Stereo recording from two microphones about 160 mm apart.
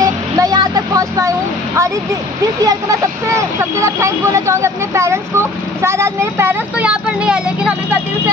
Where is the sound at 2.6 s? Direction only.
20° right (ahead or behind).